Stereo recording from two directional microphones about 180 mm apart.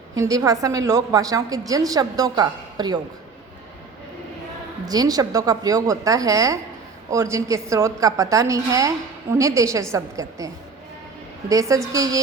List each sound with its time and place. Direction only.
0.2 s a woman's voice: 20° right (ahead or behind)
4.9 s a woman's voice: 20° right (ahead or behind)